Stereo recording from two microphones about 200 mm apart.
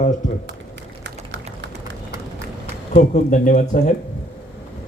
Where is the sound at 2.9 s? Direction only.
35° left (ahead or behind).